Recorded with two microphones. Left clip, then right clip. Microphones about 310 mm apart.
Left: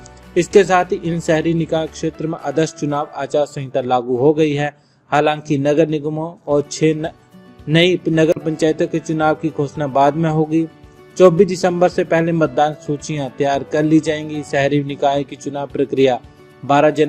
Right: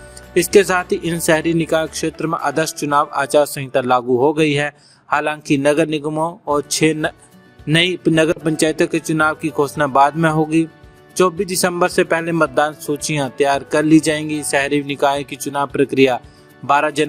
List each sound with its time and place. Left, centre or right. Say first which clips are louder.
0.3 s speech: left 1 dB; right